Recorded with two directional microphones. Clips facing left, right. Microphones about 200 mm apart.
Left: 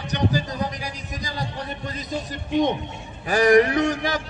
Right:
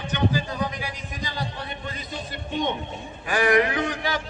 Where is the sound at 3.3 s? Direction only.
40° left (ahead or behind).